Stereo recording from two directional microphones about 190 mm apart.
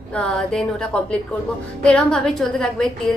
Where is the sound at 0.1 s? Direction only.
5° left (ahead or behind).